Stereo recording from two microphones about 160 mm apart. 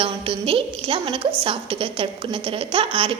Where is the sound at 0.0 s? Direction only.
35° right (ahead or behind).